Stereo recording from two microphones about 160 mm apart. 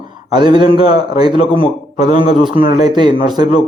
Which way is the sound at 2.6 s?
60° left (ahead or behind).